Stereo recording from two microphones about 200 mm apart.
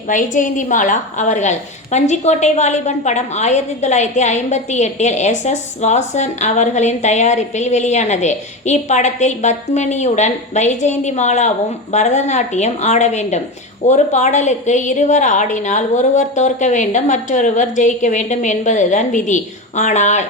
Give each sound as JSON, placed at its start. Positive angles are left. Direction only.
{"t": 0.1, "sound": "a woman's voice", "side_deg": 40}